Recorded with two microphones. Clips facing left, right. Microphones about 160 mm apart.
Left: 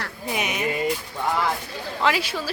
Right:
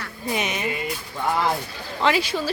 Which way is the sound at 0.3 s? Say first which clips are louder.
Right 1 dB; 5° left (ahead or behind).